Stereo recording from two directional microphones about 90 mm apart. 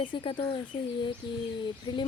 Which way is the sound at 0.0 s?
65° left (ahead or behind).